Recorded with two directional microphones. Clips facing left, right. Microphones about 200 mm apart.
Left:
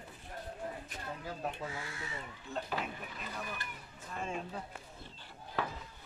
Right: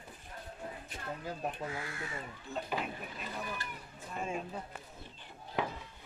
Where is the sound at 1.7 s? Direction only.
50° right (ahead or behind).